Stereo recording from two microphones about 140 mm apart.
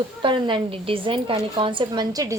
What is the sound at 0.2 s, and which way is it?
A woman's voice, 35° right (ahead or behind).